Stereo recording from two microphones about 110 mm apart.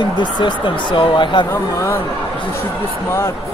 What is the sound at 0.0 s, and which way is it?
A man's voice, 45° left (ahead or behind).